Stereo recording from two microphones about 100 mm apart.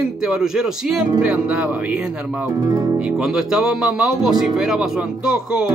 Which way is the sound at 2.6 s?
40° right (ahead or behind).